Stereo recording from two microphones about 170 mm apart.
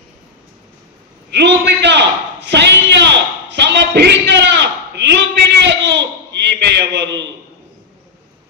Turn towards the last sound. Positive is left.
turn(degrees=-90)